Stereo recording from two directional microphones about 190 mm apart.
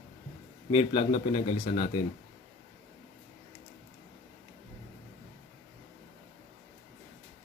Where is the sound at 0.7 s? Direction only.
30° left (ahead or behind).